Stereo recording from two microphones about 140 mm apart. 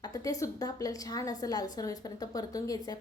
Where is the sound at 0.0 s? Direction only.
25° left (ahead or behind).